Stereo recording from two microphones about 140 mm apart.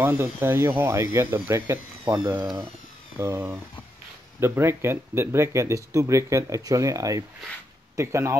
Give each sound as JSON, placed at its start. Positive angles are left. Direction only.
{"t": 0.0, "sound": "speech", "side_deg": -15}